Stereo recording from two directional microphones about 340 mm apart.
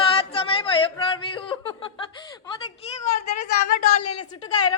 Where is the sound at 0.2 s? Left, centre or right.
Centre.